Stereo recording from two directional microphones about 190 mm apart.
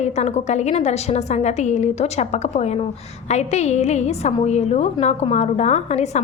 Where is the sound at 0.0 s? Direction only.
35° left (ahead or behind).